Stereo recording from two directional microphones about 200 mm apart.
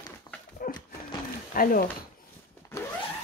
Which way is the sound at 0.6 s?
45° left (ahead or behind).